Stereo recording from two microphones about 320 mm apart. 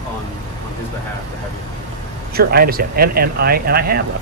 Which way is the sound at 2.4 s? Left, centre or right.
Right.